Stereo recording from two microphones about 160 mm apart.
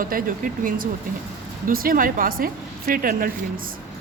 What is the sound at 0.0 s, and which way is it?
A woman's voice, 60° right (ahead or behind).